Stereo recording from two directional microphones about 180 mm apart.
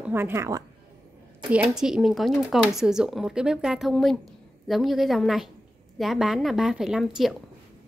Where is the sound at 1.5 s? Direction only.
5° right (ahead or behind).